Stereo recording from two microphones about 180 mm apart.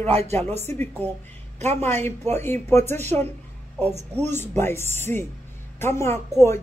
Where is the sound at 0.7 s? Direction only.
10° left (ahead or behind).